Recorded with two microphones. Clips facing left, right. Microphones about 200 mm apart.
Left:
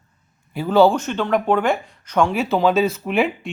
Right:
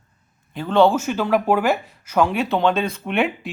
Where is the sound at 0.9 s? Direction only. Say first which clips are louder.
Right 1 dB; 5° right (ahead or behind).